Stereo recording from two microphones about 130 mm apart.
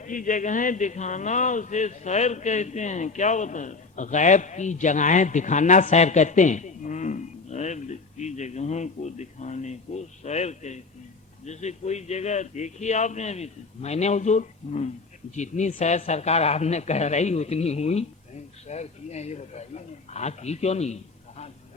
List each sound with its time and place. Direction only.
0.0 s a man's voice: 85° left; by 21.5 s 60° left (ahead or behind)